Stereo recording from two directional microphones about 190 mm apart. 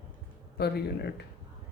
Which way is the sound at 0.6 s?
60° left (ahead or behind).